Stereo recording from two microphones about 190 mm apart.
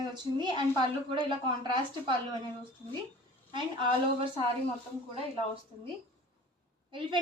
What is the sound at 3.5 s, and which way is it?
Speech, 25° right (ahead or behind).